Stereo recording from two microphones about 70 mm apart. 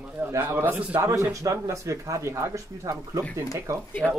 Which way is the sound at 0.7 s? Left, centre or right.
Right.